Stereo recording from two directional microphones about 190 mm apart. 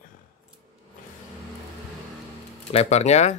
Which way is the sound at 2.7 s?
35° left (ahead or behind).